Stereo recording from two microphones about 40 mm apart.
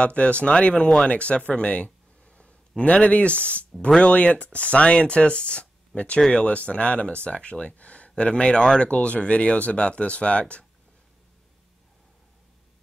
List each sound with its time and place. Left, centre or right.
0.0 s speech: left
1.5 s a sound: left
2.8 s speech: left